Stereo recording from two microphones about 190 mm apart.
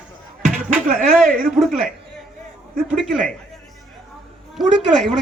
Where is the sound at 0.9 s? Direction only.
Centre (ahead or behind).